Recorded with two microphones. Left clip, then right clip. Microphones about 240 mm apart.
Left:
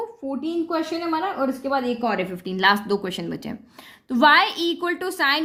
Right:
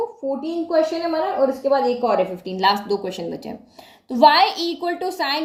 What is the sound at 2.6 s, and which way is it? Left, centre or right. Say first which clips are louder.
A woman's voice: even; left.